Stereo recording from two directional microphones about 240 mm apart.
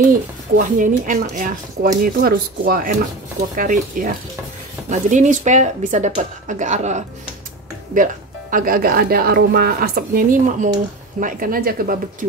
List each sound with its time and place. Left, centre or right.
0.6 s speech: right